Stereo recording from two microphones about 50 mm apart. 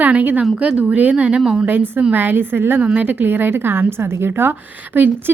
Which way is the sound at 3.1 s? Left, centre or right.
Right.